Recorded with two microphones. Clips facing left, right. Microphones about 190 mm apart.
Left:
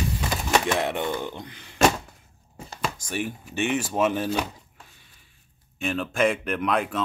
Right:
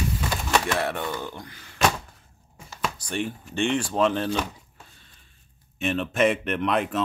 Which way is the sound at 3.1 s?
10° left (ahead or behind).